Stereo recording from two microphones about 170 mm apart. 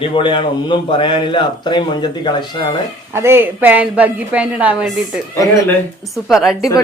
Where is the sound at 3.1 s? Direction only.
15° right (ahead or behind).